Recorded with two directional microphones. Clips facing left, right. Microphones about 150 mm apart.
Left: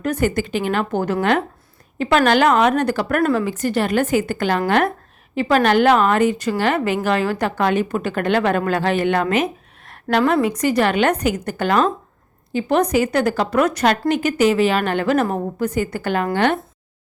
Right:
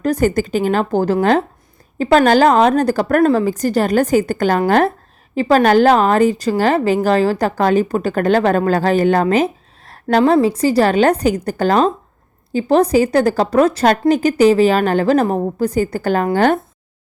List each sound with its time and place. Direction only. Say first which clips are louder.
0.0 s a woman's voice: right 4 dB; 40° right (ahead or behind)